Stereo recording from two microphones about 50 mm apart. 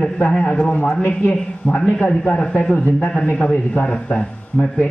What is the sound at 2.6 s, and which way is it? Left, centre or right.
A man's voice, left.